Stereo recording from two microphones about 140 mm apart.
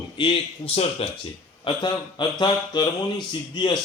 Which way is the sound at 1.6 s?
35° left (ahead or behind).